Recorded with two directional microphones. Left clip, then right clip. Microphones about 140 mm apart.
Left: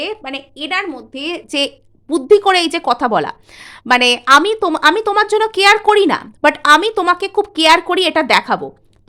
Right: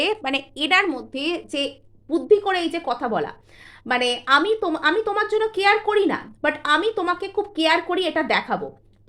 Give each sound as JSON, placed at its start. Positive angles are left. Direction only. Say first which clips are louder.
{"t": 0.0, "sound": "a woman's voice", "louder": "right 1 dB", "side_deg": -5}
{"t": 1.1, "sound": "a woman's voice", "louder": "left 6 dB", "side_deg": 15}
{"t": 1.5, "sound": "a woman's voice", "louder": "left 8 dB", "side_deg": 40}
{"t": 2.0, "sound": "a woman's voice", "louder": "left 8 dB", "side_deg": 85}